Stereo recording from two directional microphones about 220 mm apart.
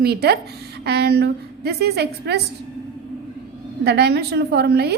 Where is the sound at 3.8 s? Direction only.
50° right (ahead or behind).